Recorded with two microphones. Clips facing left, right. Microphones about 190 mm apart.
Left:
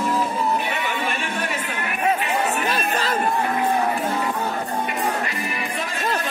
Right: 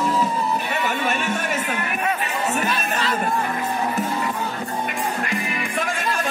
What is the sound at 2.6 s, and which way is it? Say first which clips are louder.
Chatter: left 1 dB; 40° left (ahead or behind).